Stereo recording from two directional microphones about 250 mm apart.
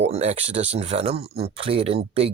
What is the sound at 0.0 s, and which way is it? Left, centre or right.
Speech, right.